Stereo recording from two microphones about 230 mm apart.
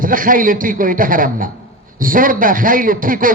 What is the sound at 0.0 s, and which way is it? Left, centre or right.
A man's voice, right.